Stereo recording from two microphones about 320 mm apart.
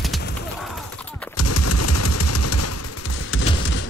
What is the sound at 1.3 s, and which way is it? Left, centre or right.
Machine gun, left.